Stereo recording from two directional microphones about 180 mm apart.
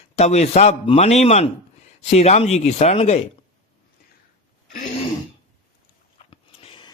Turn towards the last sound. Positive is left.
turn(degrees=30)  # may be behind; listen again after turning